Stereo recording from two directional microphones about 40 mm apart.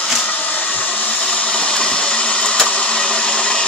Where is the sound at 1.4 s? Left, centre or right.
Left.